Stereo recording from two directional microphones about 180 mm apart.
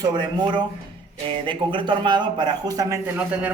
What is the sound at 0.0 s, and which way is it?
A man's voice, 25° right (ahead or behind).